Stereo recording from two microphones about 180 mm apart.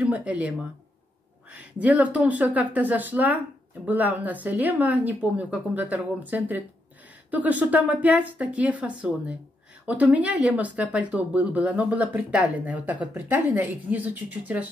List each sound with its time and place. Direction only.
0.0 s speech: 5° right (ahead or behind)